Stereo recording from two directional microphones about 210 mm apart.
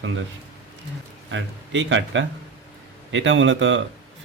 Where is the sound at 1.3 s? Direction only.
60° right (ahead or behind).